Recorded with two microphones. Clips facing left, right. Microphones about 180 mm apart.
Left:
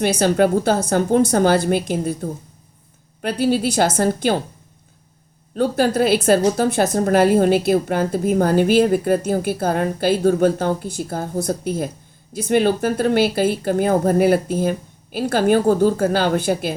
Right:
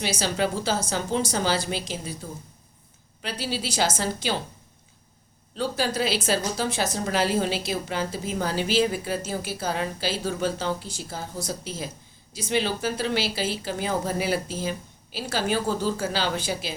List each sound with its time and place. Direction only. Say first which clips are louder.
0.0 s a woman's voice: left 10 dB; 55° left (ahead or behind)
5.5 s a woman's voice: left 9 dB; 55° left (ahead or behind)